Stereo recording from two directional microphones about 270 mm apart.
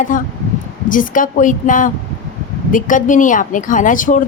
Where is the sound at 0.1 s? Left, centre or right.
Left.